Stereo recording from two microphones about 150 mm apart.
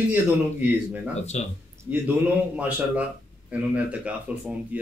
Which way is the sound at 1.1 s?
45° left (ahead or behind).